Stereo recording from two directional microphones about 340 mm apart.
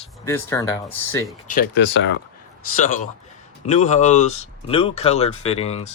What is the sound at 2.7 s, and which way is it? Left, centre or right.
Speech, left.